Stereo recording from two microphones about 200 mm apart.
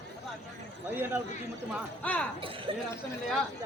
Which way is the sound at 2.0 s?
5° left (ahead or behind).